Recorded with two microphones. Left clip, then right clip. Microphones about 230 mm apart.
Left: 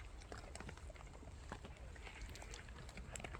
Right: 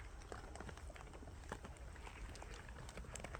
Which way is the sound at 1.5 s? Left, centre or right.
Right.